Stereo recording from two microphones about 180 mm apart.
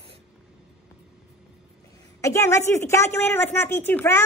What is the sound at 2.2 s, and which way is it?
A woman's voice, 15° left (ahead or behind).